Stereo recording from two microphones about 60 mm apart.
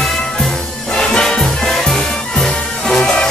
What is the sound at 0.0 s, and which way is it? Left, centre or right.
Music, centre.